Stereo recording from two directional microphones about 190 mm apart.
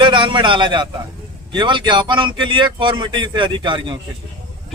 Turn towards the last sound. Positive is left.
turn(degrees=-25)  # may be behind; listen again after turning